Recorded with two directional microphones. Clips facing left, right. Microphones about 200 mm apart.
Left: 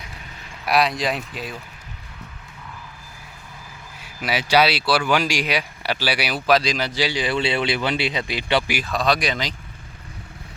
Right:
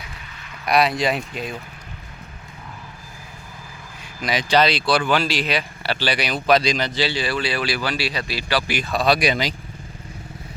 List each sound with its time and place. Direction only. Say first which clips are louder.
0.6 s speech: right 2 dB; centre (ahead or behind)
4.0 s speech: right 1 dB; 10° left (ahead or behind)
8.7 s speech: right 2 dB; centre (ahead or behind)